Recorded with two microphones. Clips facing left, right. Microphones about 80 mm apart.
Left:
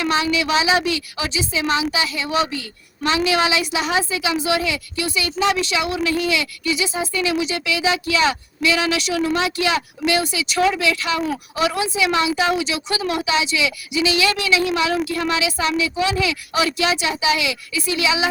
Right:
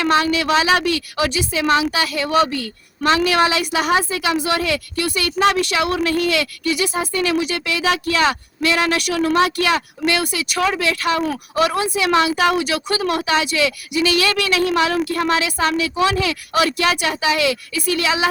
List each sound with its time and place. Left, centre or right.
0.0 s a woman's voice: right